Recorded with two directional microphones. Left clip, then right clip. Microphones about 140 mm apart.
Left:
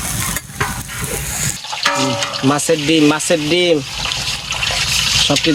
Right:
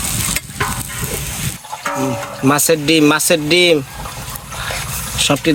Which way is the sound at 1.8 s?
Centre (ahead or behind).